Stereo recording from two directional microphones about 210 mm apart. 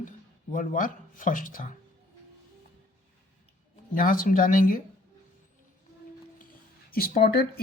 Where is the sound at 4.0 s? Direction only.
40° left (ahead or behind).